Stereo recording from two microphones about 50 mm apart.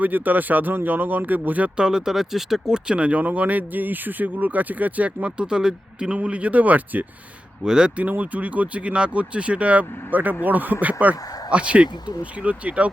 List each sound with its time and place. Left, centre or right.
0.0 s speech: right
1.7 s speech: centre
6.2 s speech: right
7.6 s speech: centre
8.2 s speech: right